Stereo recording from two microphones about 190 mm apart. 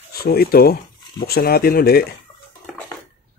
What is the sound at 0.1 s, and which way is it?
Speech, 55° left (ahead or behind).